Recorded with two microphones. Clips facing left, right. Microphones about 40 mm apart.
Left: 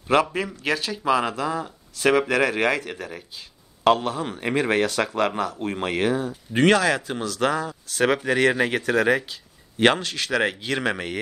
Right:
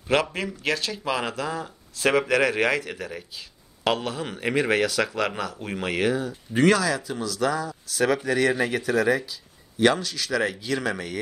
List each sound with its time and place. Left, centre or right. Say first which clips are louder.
0.1 s speech: left 3 dB; left
1.2 s a man's voice: left 3 dB; left